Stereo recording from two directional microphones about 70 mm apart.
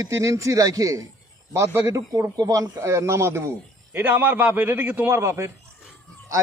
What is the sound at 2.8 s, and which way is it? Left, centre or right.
Speech, right.